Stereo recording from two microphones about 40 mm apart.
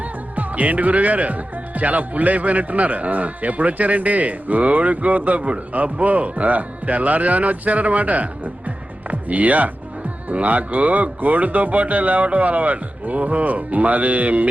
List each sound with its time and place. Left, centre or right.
0.0 s speech: right